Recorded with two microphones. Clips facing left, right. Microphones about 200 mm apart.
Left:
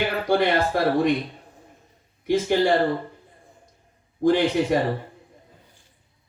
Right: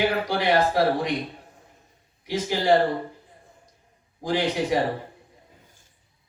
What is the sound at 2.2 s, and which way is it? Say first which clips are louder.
Speech: left 6 dB; 55° left (ahead or behind).